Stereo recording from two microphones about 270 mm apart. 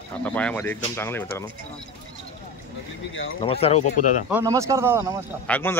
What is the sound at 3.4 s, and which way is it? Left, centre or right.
Speech, left.